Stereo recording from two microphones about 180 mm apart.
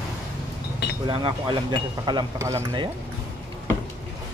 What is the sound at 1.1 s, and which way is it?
Speech, 30° right (ahead or behind).